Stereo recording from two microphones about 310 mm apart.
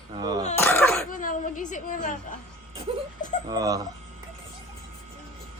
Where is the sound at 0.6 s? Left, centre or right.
Centre.